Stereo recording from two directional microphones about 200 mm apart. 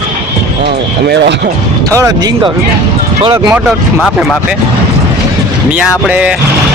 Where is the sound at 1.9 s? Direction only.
20° right (ahead or behind).